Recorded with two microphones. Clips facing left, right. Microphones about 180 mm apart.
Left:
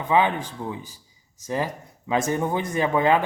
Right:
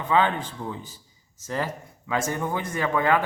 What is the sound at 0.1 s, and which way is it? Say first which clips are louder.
Speech: left 1 dB; 15° left (ahead or behind).